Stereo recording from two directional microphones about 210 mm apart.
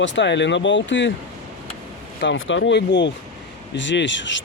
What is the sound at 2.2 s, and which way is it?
Speech, 65° left (ahead or behind).